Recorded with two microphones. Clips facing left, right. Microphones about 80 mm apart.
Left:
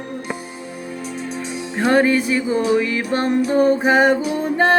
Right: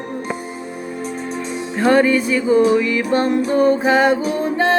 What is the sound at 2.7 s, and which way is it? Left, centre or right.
Music, left.